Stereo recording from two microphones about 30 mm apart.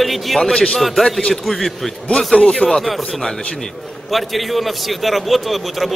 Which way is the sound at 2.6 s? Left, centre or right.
Left.